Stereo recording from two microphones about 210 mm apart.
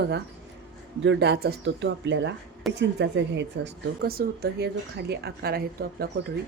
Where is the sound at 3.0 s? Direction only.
55° right (ahead or behind).